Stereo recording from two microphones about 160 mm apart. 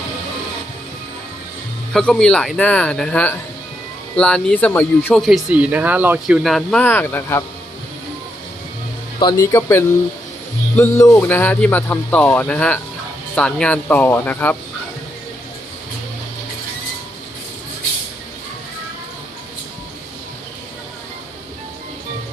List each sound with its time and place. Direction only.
1.9 s speech: 5° left (ahead or behind)
9.4 s speech: 20° left (ahead or behind)